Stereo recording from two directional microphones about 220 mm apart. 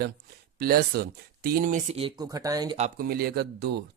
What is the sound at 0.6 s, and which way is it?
Speech, 45° right (ahead or behind).